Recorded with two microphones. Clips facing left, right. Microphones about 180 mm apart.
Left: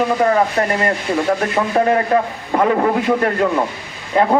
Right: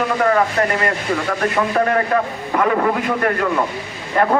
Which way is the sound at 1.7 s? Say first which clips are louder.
Left 4 dB; 25° left (ahead or behind).